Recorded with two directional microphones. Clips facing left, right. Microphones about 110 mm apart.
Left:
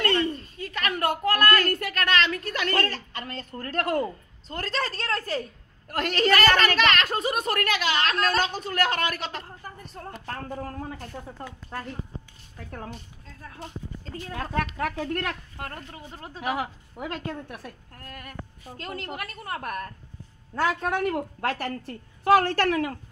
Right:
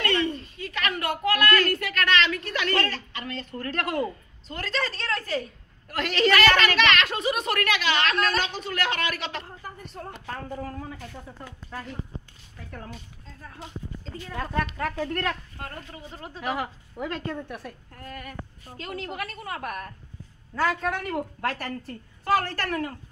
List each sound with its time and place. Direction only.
0.0 s a woman's voice: 40° left (ahead or behind)
10.2 s speech: 55° left (ahead or behind)
14.4 s a woman's voice: 55° left (ahead or behind)
15.0 s a woman's voice: 10° left (ahead or behind)
20.5 s a woman's voice: 55° left (ahead or behind); by 22.9 s 70° left (ahead or behind)